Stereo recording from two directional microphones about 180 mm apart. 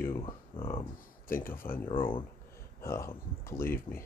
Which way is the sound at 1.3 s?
50° left (ahead or behind).